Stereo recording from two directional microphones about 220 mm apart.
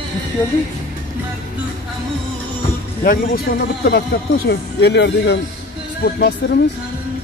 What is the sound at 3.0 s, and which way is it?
A man's voice, 45° left (ahead or behind).